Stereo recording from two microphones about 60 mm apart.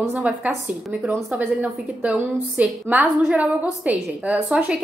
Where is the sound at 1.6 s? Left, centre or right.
Right.